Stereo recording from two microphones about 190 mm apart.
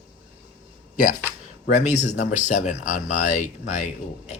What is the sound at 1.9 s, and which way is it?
Speech, 40° left (ahead or behind).